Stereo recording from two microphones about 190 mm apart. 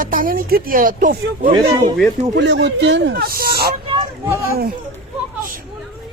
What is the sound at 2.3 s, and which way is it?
Speech, 65° right (ahead or behind).